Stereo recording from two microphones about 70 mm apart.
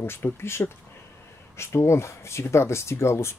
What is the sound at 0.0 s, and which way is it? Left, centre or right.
Speech, left.